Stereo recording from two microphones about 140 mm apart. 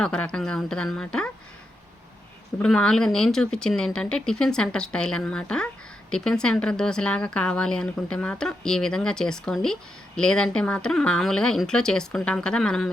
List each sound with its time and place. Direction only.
0.0 s speech: 5° left (ahead or behind)
2.6 s speech: 5° left (ahead or behind)